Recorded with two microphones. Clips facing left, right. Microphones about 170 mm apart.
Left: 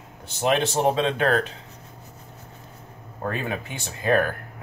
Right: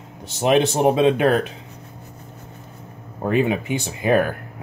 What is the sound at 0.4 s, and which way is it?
Speech, 15° right (ahead or behind).